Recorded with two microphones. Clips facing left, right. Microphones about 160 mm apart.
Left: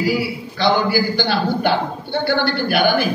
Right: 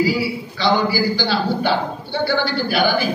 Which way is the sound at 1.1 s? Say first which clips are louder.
Left 1 dB; 55° left (ahead or behind).